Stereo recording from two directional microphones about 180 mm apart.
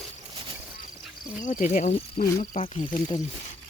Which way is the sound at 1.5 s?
45° left (ahead or behind).